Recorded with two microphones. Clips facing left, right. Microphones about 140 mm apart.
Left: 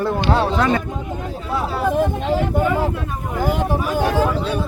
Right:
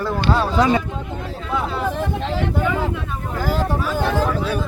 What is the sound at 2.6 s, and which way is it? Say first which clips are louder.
Speech: left 2 dB; 5° left (ahead or behind).